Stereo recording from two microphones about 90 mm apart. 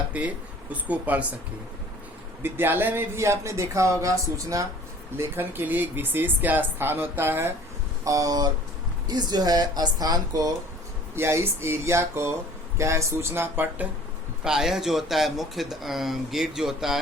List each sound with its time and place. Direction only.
0.1 s speech: 15° right (ahead or behind)
2.4 s speech: 25° right (ahead or behind)
5.1 s speech: 25° right (ahead or behind)
8.0 s speech: 40° right (ahead or behind)
11.1 s speech: 30° right (ahead or behind)
14.4 s speech: 5° right (ahead or behind)